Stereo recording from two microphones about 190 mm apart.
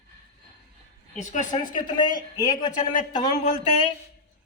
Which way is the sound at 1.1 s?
40° left (ahead or behind).